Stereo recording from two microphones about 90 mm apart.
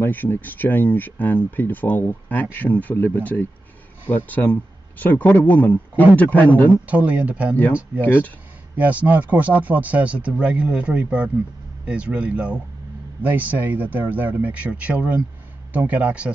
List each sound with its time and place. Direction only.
0.0 s speech: 20° left (ahead or behind)
6.9 s speech: 15° right (ahead or behind)
8.0 s speech: 20° left (ahead or behind)
8.7 s speech: 15° right (ahead or behind)